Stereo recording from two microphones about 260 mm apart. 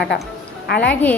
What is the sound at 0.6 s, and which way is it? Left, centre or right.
Speech, left.